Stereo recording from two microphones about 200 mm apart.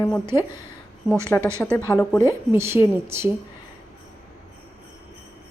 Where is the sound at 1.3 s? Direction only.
10° left (ahead or behind).